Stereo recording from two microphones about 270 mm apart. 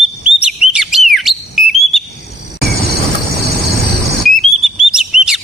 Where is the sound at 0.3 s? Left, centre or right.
Centre.